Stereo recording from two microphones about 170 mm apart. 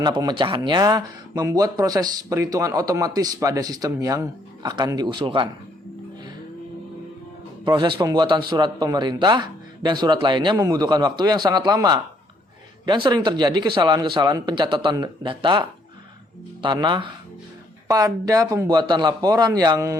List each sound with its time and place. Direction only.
0.0 s speech: 25° right (ahead or behind)
7.6 s speech: 25° right (ahead or behind)
16.6 s speech: 25° right (ahead or behind)